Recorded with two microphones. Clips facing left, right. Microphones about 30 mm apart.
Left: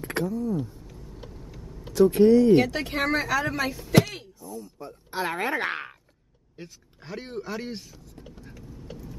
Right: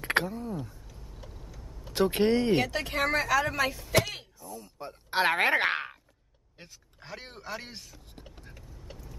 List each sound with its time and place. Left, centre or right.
0.0 s speech: right
0.8 s vehicle: left
1.9 s speech: right
2.7 s a man's voice: centre
4.7 s speech: right
5.6 s speech: right
6.5 s a man's voice: centre